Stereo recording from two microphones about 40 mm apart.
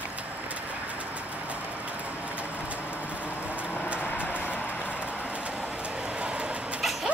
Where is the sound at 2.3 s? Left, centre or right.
Right.